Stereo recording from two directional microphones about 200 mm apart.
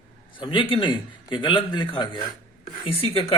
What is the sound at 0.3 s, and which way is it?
A man's voice, 25° left (ahead or behind).